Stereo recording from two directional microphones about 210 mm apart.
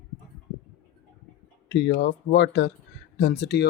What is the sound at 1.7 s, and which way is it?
Speech, 50° left (ahead or behind).